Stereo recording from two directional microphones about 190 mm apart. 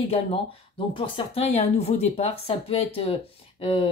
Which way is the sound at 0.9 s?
30° left (ahead or behind).